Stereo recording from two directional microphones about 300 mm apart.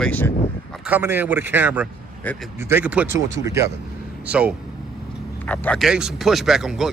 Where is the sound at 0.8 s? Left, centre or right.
Centre.